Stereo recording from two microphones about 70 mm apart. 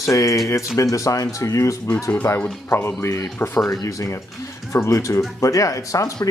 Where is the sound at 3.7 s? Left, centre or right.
Left.